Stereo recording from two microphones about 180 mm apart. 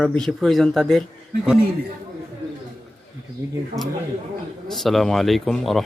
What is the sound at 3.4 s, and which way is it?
Speech, 15° right (ahead or behind).